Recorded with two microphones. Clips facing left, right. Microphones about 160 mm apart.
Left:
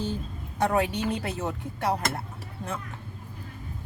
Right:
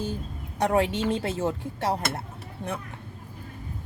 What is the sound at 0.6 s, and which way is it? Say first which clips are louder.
Speech: right 2 dB; 25° right (ahead or behind).